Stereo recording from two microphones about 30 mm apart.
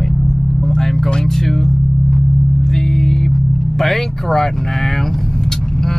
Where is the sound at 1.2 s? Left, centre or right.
Centre.